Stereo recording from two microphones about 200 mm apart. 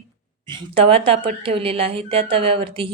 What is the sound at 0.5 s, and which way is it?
A woman's voice, 25° right (ahead or behind).